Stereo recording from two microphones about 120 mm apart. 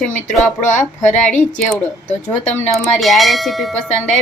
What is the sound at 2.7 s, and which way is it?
Speech, centre (ahead or behind).